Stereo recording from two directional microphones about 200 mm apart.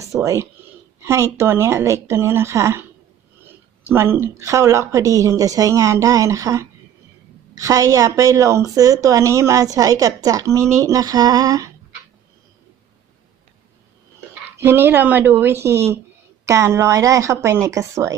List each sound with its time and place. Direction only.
0.0 s a woman's voice: 15° right (ahead or behind)
3.9 s a woman's voice: 10° right (ahead or behind)
14.6 s a woman's voice: 10° right (ahead or behind)